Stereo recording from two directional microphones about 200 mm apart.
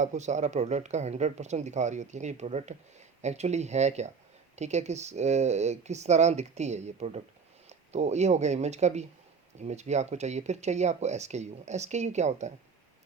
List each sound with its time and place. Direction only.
0.0 s speech: 35° right (ahead or behind)